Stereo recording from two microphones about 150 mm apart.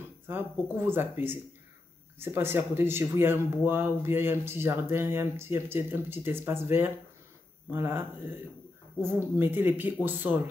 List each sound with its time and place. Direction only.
0.3 s speech: 15° right (ahead or behind)